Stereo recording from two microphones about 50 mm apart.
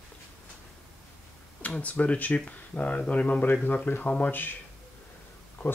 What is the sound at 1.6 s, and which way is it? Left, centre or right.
Speech, left.